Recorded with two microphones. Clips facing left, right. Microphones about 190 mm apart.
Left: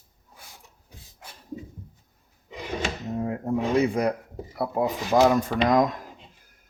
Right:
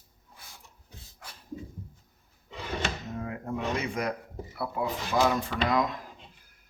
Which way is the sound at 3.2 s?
35° left (ahead or behind).